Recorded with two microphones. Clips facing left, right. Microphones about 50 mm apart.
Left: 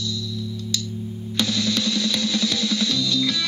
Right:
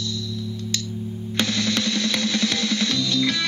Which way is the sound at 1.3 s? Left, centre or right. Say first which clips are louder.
Even; right.